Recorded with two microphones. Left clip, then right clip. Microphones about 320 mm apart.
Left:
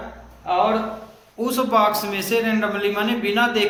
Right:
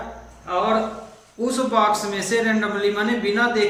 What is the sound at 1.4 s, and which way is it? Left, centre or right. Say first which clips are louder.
A man's voice: left 1 dB; centre.